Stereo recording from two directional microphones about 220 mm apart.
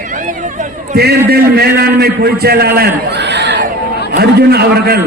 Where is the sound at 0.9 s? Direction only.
45° right (ahead or behind).